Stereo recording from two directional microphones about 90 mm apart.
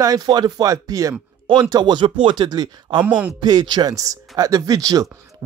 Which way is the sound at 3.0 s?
15° right (ahead or behind).